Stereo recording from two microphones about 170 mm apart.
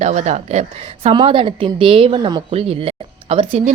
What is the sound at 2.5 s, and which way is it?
Speech, 35° right (ahead or behind).